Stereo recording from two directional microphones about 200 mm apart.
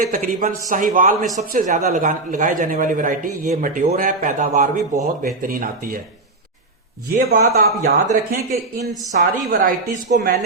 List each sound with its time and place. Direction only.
0.1 s speech: 40° right (ahead or behind)
7.2 s speech: 45° right (ahead or behind)